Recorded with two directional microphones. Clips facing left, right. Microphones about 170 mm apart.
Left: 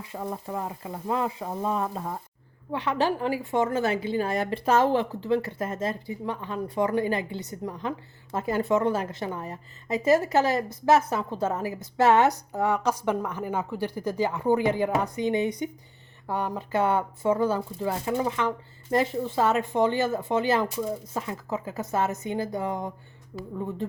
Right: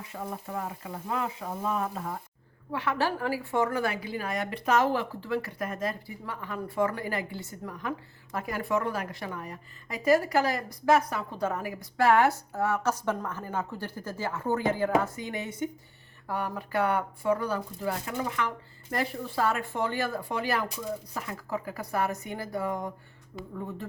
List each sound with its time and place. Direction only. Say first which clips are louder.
0.1 s a woman's voice: left 4 dB; 30° left (ahead or behind)